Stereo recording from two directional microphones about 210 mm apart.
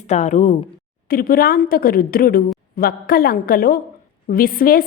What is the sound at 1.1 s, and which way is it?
A woman's voice, 45° left (ahead or behind).